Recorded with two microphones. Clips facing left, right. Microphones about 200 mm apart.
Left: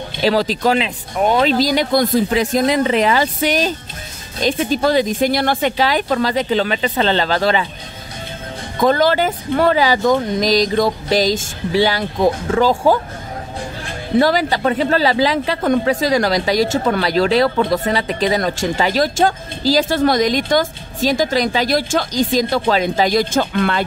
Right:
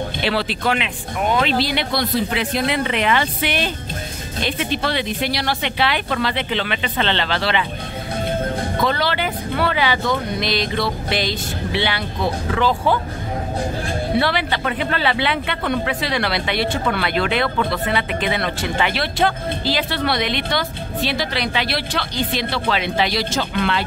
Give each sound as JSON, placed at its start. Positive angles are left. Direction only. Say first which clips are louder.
{"t": 0.2, "sound": "speech", "louder": "left 7 dB", "side_deg": 40}
{"t": 8.8, "sound": "speech", "louder": "left 9 dB", "side_deg": 45}
{"t": 14.1, "sound": "speech", "louder": "left 7 dB", "side_deg": 40}